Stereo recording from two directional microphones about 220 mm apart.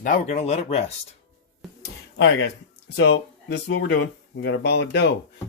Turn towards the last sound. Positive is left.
turn(degrees=50)  # may be behind; listen again after turning